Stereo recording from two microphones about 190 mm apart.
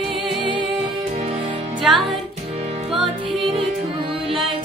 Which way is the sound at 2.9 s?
30° right (ahead or behind).